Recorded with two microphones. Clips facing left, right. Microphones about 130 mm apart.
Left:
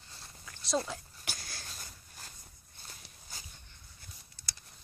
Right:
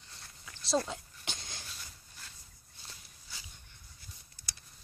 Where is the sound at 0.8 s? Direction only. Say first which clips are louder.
Right 1 dB; 20° right (ahead or behind).